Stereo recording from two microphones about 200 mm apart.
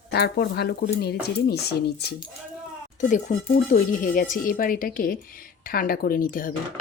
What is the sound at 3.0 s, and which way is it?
Speech, 35° left (ahead or behind).